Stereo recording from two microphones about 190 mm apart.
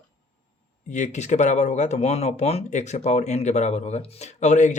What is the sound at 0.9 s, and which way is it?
Speech, 40° left (ahead or behind).